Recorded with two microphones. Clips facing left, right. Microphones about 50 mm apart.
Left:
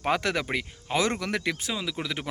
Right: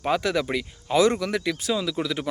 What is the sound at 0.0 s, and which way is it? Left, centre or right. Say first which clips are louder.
Speech: right 3 dB; left.